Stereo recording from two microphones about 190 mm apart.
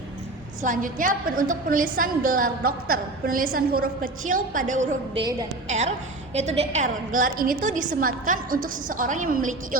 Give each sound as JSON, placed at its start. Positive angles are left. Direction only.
{"t": 0.6, "sound": "a woman's voice", "side_deg": -45}
{"t": 5.1, "sound": "a woman's voice", "side_deg": -25}
{"t": 5.6, "sound": "a woman's voice", "side_deg": -35}